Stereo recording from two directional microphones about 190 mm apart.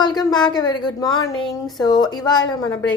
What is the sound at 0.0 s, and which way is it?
Speech, 20° left (ahead or behind).